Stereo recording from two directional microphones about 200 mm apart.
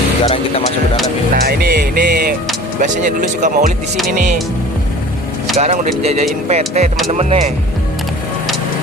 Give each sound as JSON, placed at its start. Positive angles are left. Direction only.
{"t": 1.3, "sound": "speech", "side_deg": -50}
{"t": 2.8, "sound": "speech", "side_deg": -40}
{"t": 5.5, "sound": "speech", "side_deg": -35}